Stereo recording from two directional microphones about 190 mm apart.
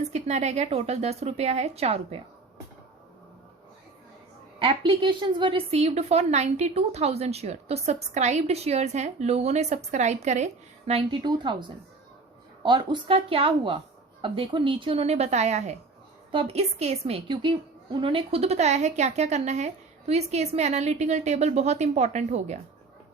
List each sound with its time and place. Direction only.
0.0 s a woman's voice: 35° right (ahead or behind)
4.6 s a woman's voice: 25° right (ahead or behind)
12.6 s a woman's voice: 25° right (ahead or behind)